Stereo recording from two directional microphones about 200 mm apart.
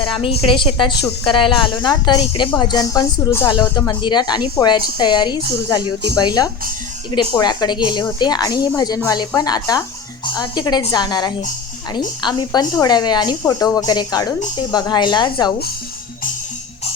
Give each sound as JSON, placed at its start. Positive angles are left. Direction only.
{"t": 0.0, "sound": "a woman's voice", "side_deg": 25}